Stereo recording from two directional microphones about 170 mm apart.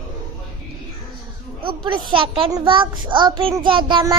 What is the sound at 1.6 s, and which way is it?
A child's voice, 30° right (ahead or behind).